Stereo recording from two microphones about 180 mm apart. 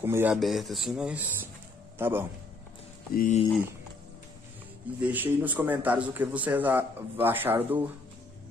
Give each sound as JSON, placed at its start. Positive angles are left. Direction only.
{"t": 0.0, "sound": "a man's voice", "side_deg": -10}
{"t": 0.4, "sound": "a man's voice", "side_deg": 0}
{"t": 3.2, "sound": "speech", "side_deg": 40}
{"t": 5.0, "sound": "a man's voice", "side_deg": -10}